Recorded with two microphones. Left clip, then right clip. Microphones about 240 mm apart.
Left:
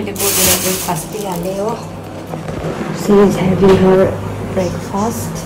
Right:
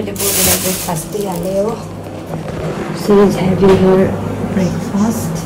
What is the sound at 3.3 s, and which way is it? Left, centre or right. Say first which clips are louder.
Speech: even; centre.